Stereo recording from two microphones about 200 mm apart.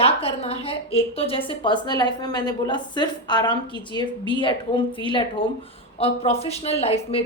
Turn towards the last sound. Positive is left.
turn(degrees=30)  # may be behind; listen again after turning